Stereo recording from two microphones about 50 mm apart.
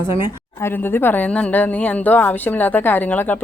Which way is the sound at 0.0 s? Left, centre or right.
Right.